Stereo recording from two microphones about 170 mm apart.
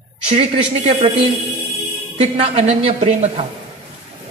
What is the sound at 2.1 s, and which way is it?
A woman's voice, 40° right (ahead or behind).